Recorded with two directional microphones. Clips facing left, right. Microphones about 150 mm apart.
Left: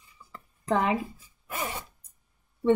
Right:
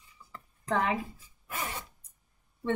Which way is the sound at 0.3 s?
10° left (ahead or behind).